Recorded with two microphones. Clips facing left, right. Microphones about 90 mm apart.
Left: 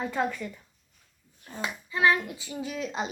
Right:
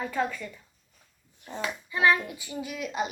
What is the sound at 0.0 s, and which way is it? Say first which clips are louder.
Speech: left 1 dB; 15° left (ahead or behind).